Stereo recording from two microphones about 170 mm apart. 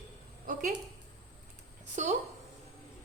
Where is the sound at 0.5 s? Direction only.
50° right (ahead or behind).